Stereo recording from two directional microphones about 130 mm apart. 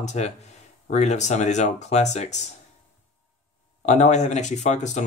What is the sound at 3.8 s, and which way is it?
Speech, 65° left (ahead or behind).